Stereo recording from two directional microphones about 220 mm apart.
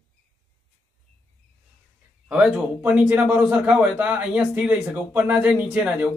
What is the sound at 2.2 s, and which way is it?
A man's voice, 5° right (ahead or behind).